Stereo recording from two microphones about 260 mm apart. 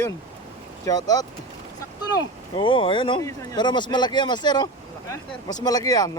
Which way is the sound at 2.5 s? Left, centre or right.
Centre.